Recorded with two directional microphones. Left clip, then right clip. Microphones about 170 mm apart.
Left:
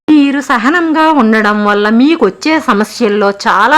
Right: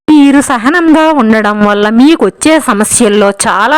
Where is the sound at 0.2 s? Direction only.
45° right (ahead or behind).